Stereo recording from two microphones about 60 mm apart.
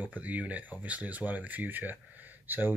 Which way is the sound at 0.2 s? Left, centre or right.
Right.